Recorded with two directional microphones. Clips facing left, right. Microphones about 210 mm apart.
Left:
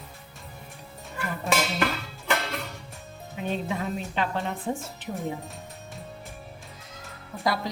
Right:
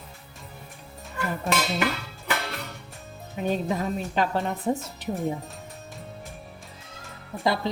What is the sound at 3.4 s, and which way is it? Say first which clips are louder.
Speech: right 3 dB; 40° right (ahead or behind).